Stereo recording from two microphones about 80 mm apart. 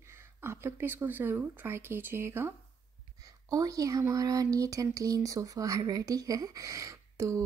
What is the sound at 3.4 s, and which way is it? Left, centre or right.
Speech, right.